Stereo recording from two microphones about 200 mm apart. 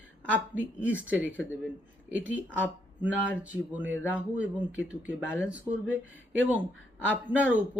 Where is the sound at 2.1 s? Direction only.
70° right (ahead or behind).